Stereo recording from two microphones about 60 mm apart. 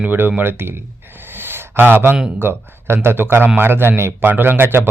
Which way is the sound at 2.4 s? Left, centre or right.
Right.